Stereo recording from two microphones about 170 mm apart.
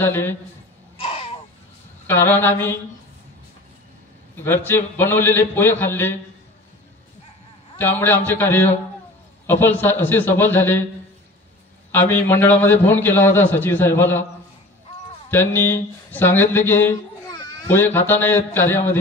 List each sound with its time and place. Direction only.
0.0 s a man's voice: 15° left (ahead or behind)
0.9 s a sound: 35° left (ahead or behind)
2.0 s a man's voice: 10° left (ahead or behind)
4.4 s a man's voice: 10° left (ahead or behind)
7.7 s a man's voice: 10° left (ahead or behind)
11.9 s a man's voice: 10° left (ahead or behind)
15.3 s a man's voice: 15° left (ahead or behind)